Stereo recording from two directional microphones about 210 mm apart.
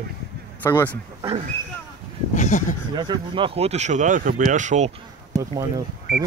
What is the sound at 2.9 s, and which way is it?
Speech, 20° right (ahead or behind).